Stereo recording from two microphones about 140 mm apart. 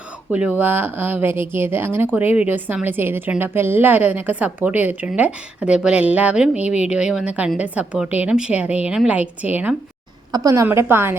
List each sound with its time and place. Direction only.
0.3 s a woman's voice: 10° right (ahead or behind)
10.3 s a woman's voice: 25° right (ahead or behind)